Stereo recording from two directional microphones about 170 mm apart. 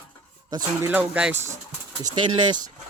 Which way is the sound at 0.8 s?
10° right (ahead or behind).